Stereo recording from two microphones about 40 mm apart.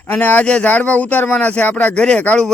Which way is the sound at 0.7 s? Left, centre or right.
Left.